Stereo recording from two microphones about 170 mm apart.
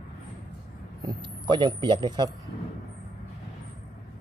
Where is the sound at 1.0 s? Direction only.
25° right (ahead or behind).